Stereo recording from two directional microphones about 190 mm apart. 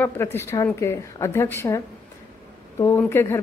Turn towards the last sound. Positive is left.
turn(degrees=10)  # may be behind; listen again after turning